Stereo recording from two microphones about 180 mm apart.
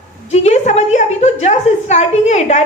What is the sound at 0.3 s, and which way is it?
A man's voice, 35° left (ahead or behind).